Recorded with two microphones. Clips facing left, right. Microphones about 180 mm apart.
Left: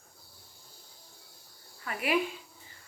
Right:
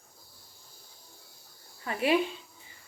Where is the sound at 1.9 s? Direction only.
30° right (ahead or behind).